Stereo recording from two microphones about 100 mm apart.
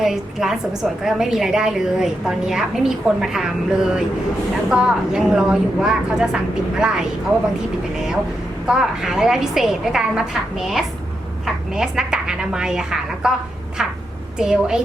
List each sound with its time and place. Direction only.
0.0 s a woman's voice: 5° right (ahead or behind)
8.6 s a woman's voice: 5° right (ahead or behind)
14.3 s a woman's voice: 5° right (ahead or behind)